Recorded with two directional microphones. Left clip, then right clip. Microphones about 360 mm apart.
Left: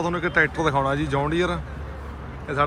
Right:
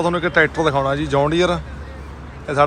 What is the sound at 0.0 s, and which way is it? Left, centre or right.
A man's voice, centre.